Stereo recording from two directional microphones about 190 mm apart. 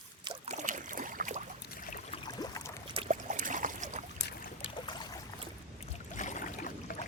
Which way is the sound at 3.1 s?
40° right (ahead or behind).